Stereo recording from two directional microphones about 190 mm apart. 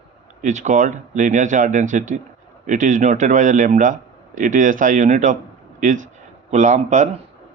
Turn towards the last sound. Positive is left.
turn(degrees=-40)  # may be behind; listen again after turning